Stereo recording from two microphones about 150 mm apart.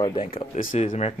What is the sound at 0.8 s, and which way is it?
Speech, 45° left (ahead or behind).